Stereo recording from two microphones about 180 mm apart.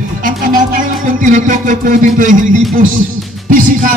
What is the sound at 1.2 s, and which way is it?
A man's voice, 45° right (ahead or behind).